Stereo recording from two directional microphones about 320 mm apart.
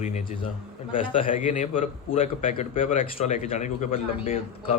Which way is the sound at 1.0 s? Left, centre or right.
Centre.